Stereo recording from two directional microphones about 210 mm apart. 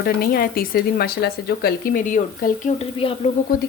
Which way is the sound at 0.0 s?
45° left (ahead or behind).